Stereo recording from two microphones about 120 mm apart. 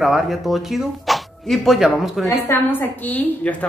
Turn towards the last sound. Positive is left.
turn(degrees=15)  # may be behind; listen again after turning